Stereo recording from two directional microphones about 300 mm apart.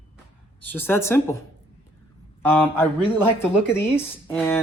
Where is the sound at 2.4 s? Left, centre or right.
Centre.